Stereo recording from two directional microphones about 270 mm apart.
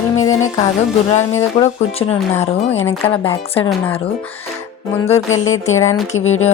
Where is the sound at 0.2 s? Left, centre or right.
Centre.